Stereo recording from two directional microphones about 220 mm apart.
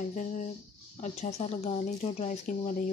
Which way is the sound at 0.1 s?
35° left (ahead or behind).